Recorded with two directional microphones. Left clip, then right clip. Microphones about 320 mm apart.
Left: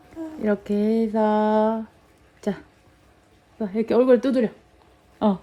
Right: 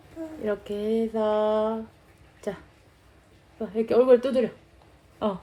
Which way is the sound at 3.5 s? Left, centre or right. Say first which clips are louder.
Left 1 dB; left.